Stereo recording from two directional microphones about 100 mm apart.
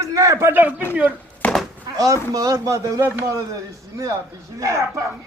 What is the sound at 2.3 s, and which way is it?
Speech, 35° right (ahead or behind).